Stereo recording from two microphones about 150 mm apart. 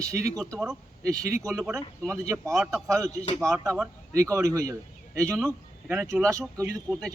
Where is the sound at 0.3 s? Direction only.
Centre (ahead or behind).